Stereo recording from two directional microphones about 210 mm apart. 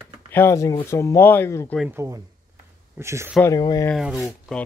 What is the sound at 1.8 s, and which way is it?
Speech, 10° right (ahead or behind).